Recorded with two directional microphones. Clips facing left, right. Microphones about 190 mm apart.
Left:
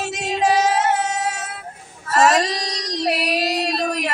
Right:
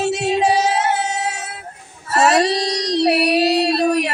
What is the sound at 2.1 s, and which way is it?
Music, 30° right (ahead or behind).